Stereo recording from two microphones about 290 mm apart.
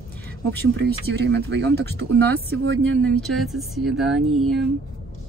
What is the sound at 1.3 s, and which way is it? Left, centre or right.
Speech, right.